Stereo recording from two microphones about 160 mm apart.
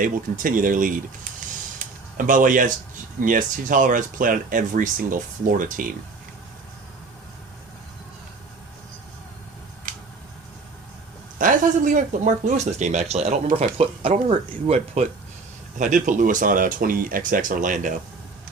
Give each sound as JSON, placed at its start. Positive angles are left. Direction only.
{"t": 0.0, "sound": "speech", "side_deg": -55}
{"t": 1.8, "sound": "a sound", "side_deg": -55}
{"t": 2.1, "sound": "speech", "side_deg": -55}
{"t": 11.3, "sound": "speech", "side_deg": -55}
{"t": 15.8, "sound": "speech", "side_deg": -50}